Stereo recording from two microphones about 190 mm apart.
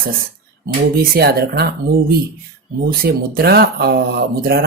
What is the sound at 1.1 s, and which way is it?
Speech, 55° right (ahead or behind).